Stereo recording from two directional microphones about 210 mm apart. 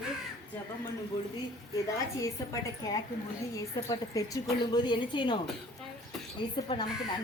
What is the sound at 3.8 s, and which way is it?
A woman's voice, 20° left (ahead or behind).